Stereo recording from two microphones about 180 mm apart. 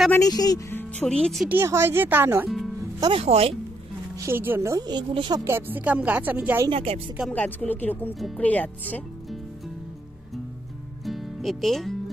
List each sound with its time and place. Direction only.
0.1 s speech: 20° left (ahead or behind); by 1.5 s centre (ahead or behind)
1.5 s a woman's voice: 15° right (ahead or behind)
3.0 s speech: 30° right (ahead or behind)
4.2 s a woman's voice: 10° right (ahead or behind)
6.7 s speech: 30° right (ahead or behind)
7.2 s speech: 5° left (ahead or behind)
11.1 s music: centre (ahead or behind)